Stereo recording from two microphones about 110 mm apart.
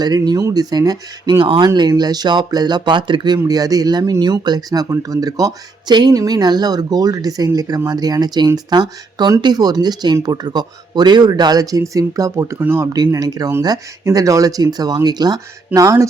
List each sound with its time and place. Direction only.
0.0 s speech: 35° right (ahead or behind)
13.1 s speech: 35° right (ahead or behind)